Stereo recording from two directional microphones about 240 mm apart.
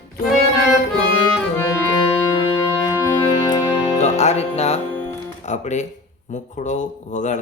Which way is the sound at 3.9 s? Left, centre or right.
Left.